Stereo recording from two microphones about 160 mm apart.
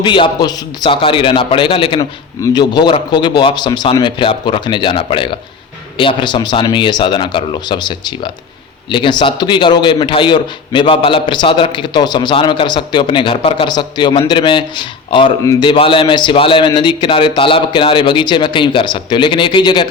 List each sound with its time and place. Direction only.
0.0 s a man's voice: 30° left (ahead or behind)